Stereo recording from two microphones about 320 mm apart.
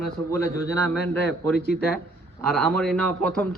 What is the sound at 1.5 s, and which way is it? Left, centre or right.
Speech, left.